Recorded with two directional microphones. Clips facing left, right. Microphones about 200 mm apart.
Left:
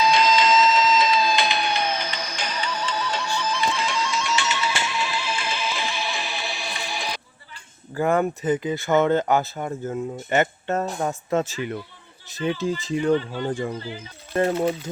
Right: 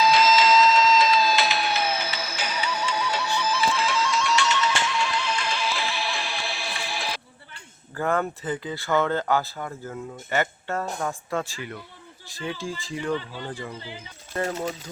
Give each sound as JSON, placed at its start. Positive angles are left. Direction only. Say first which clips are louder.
{"t": 0.0, "sound": "music", "louder": "even", "side_deg": -5}
{"t": 7.9, "sound": "speech", "louder": "left 4 dB", "side_deg": 15}